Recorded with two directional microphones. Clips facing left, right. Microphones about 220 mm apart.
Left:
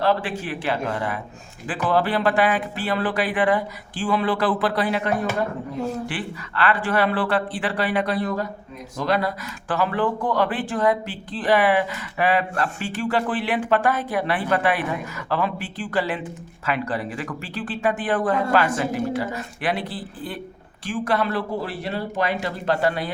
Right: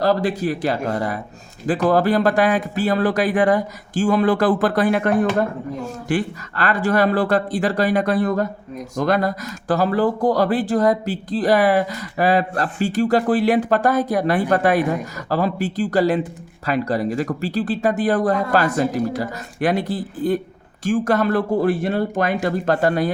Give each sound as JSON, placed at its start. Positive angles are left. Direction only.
{"t": 0.0, "sound": "speech", "side_deg": -40}